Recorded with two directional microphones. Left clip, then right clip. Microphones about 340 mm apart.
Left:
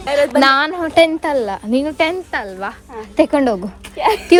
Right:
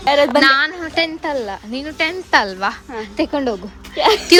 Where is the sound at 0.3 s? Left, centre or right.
Centre.